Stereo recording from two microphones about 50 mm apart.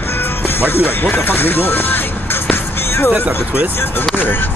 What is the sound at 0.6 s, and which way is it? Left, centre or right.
Speech, left.